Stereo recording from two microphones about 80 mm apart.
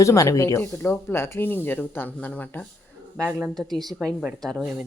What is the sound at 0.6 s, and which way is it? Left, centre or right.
Speech, left.